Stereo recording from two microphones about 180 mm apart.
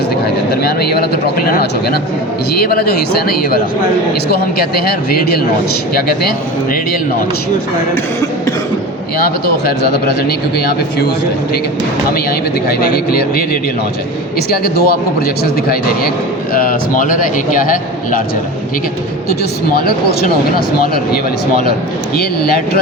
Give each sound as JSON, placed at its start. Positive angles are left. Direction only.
{"t": 0.5, "sound": "speech", "side_deg": 60}
{"t": 9.6, "sound": "speech", "side_deg": 60}
{"t": 12.6, "sound": "speech", "side_deg": 55}
{"t": 14.5, "sound": "speech", "side_deg": 55}
{"t": 16.6, "sound": "a man's voice", "side_deg": 50}
{"t": 19.3, "sound": "speech", "side_deg": 60}